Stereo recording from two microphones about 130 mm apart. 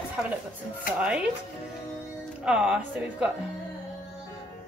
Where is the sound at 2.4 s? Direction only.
5° right (ahead or behind).